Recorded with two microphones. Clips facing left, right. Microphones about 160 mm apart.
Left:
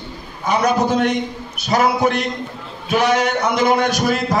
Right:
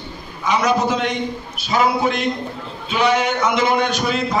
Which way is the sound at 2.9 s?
45° left (ahead or behind).